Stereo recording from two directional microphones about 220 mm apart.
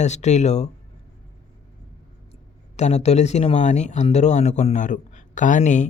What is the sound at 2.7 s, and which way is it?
Speech, 30° left (ahead or behind).